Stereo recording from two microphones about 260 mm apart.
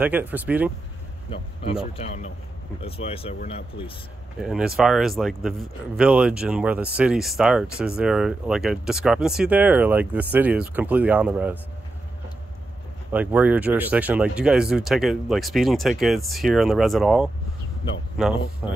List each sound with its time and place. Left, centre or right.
0.0 s speech: centre
1.3 s a man's voice: left
4.4 s speech: centre
13.1 s speech: centre